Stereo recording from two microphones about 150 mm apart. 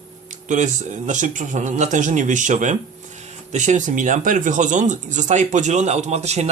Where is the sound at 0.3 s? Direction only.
55° right (ahead or behind).